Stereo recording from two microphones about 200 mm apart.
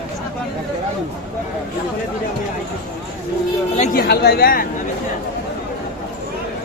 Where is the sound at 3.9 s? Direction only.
55° left (ahead or behind).